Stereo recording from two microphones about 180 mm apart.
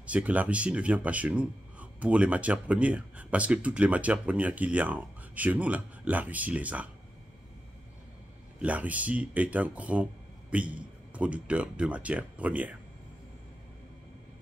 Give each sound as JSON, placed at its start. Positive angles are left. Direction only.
{"t": 0.0, "sound": "speech", "side_deg": -10}
{"t": 8.5, "sound": "speech", "side_deg": -10}